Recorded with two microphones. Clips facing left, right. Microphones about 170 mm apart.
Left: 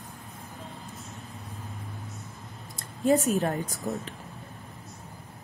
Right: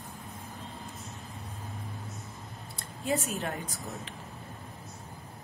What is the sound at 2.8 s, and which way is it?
A woman's voice, 40° left (ahead or behind).